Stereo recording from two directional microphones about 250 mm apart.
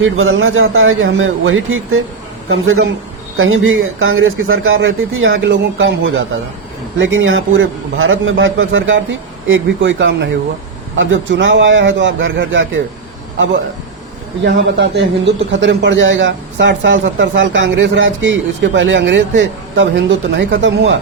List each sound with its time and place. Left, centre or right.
0.0 s a man's voice: right
14.4 s a man's voice: right